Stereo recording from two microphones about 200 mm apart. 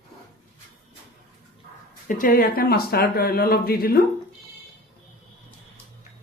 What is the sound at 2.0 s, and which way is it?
Speech, 45° left (ahead or behind).